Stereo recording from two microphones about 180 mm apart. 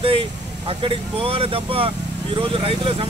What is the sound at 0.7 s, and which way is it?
Speech, 30° right (ahead or behind).